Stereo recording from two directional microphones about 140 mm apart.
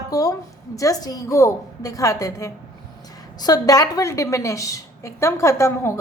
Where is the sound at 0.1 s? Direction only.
25° left (ahead or behind).